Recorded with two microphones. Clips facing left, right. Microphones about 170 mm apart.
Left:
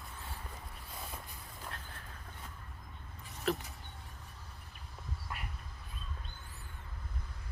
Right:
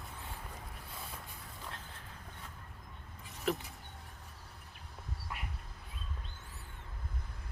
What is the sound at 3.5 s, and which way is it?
Vehicle, 15° right (ahead or behind).